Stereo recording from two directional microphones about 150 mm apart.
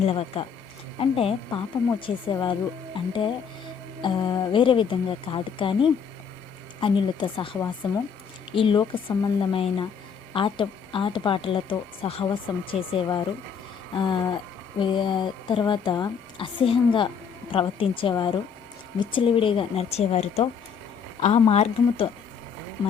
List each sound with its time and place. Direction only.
0.0 s a woman's voice: 40° left (ahead or behind)